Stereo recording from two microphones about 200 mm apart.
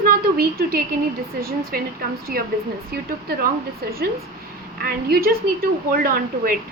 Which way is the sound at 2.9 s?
50° right (ahead or behind).